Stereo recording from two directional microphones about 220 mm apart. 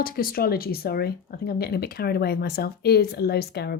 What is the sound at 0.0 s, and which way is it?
Speech, 40° left (ahead or behind).